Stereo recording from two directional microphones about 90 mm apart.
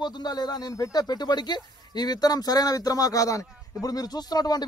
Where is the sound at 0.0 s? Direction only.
50° left (ahead or behind).